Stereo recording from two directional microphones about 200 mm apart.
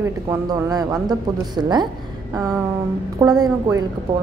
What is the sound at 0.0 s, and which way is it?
A man's voice, 15° right (ahead or behind).